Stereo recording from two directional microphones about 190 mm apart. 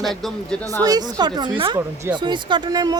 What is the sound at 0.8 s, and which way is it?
A woman's voice, 20° right (ahead or behind).